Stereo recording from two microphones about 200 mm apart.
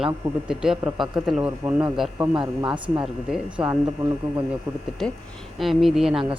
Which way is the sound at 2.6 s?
25° right (ahead or behind).